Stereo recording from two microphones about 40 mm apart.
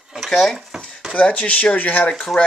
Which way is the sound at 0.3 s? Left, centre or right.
Centre.